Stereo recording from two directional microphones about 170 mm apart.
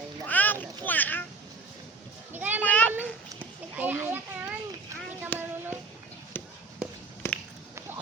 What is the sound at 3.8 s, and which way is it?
Children playing, 10° right (ahead or behind).